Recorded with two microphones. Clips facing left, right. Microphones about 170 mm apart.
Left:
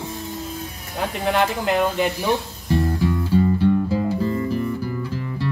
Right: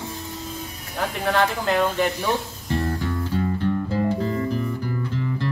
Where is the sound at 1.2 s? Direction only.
15° left (ahead or behind).